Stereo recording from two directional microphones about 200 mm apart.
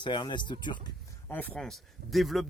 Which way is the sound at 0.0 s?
25° left (ahead or behind).